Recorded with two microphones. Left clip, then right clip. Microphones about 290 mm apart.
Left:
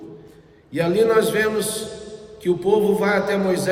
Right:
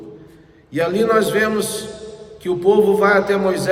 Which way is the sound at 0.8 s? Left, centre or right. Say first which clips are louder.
Right 1 dB; centre.